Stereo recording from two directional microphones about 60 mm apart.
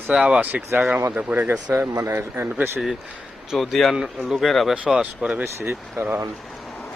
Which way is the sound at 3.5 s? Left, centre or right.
Centre.